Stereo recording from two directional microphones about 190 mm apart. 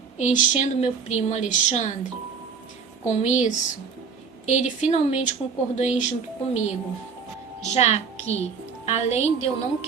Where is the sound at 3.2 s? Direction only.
40° left (ahead or behind).